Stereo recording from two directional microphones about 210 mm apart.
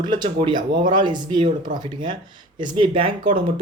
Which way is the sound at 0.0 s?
20° right (ahead or behind).